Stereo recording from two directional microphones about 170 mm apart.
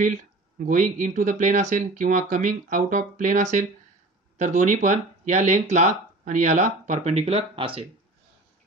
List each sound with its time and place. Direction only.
0.0 s speech: 45° right (ahead or behind); by 7.8 s 30° right (ahead or behind)